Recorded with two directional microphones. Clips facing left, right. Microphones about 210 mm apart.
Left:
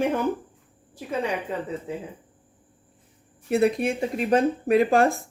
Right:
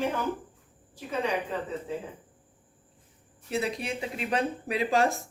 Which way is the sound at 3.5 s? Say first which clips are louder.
Left 9 dB; 55° left (ahead or behind).